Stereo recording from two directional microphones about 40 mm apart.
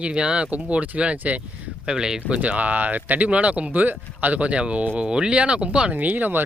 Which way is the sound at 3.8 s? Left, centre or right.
Right.